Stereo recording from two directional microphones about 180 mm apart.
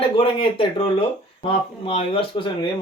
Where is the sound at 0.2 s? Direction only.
30° left (ahead or behind).